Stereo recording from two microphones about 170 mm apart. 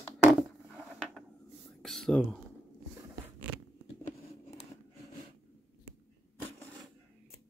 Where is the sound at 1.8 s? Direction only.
Centre (ahead or behind).